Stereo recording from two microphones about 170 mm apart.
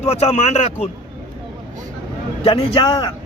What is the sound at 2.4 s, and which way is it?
Speech, 30° left (ahead or behind).